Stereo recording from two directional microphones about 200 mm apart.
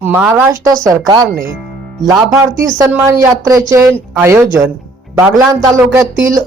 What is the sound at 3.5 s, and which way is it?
Speech, 15° right (ahead or behind).